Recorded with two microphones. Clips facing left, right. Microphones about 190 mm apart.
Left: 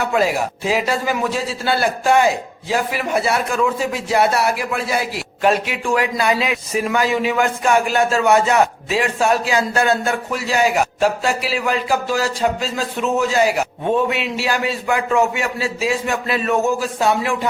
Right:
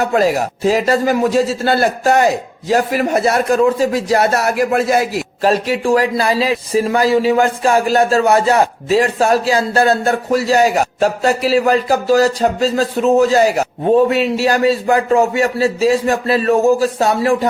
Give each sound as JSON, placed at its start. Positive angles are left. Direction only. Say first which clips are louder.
{"t": 0.0, "sound": "a man's voice", "louder": "right 4 dB", "side_deg": -40}